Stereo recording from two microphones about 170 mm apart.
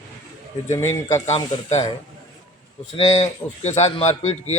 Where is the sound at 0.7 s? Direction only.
15° left (ahead or behind).